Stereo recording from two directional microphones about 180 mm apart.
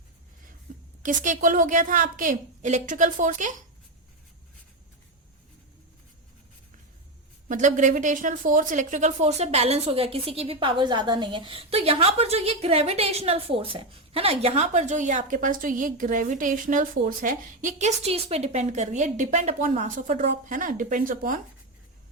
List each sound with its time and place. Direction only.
0.7 s a sound: 50° right (ahead or behind)
1.0 s a woman's voice: 45° right (ahead or behind)
7.4 s a woman's voice: 45° right (ahead or behind)